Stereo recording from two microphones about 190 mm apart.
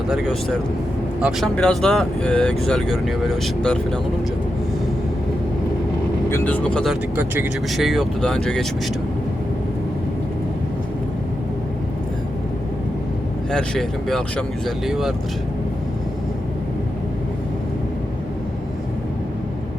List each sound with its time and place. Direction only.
0.1 s speech: centre (ahead or behind)
6.3 s speech: 10° left (ahead or behind)
7.2 s speech: 10° right (ahead or behind)
13.5 s speech: centre (ahead or behind)